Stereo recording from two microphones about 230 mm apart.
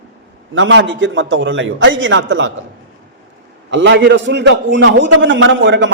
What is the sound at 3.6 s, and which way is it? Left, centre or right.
A man's voice, right.